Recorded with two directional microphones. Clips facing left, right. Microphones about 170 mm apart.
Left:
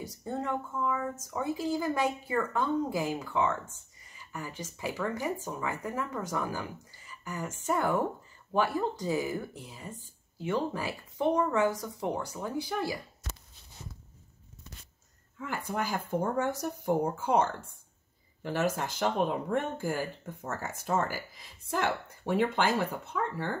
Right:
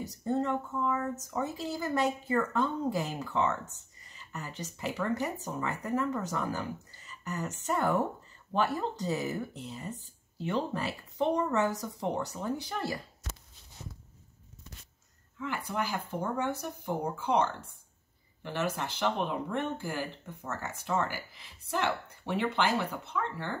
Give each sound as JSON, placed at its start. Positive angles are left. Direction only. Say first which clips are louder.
{"t": 0.1, "sound": "speech", "louder": "right 4 dB", "side_deg": 10}
{"t": 15.3, "sound": "speech", "louder": "even", "side_deg": 45}